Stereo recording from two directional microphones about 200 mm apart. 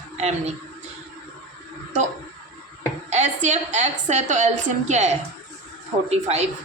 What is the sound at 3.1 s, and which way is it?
A woman's voice, 35° right (ahead or behind).